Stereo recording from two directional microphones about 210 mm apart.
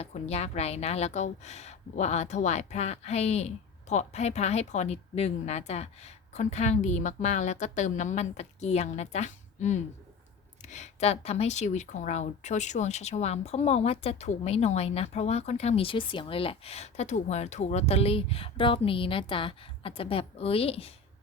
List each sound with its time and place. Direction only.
0.0 s a woman's voice: 30° left (ahead or behind)